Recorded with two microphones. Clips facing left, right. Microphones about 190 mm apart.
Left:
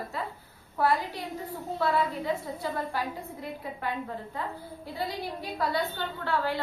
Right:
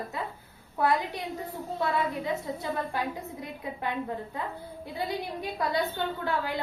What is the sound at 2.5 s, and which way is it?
Speech, 20° right (ahead or behind).